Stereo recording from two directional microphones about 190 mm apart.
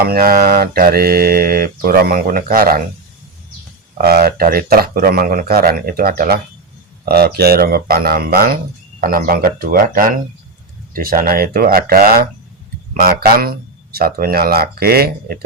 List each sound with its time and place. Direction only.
0.0 s mantra: 50° right (ahead or behind)
3.9 s mantra: 55° right (ahead or behind)